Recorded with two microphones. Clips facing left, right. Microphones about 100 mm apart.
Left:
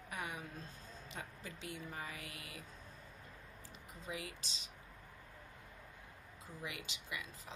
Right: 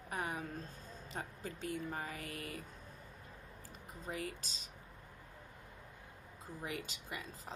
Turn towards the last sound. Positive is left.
turn(degrees=-40)  # may be behind; listen again after turning